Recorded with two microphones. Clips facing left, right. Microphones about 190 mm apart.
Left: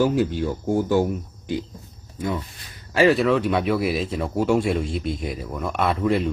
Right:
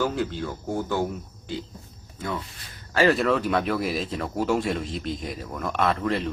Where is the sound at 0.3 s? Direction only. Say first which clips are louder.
Left 7 dB; 15° left (ahead or behind).